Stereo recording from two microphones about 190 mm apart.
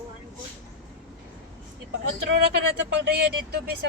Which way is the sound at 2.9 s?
55° right (ahead or behind).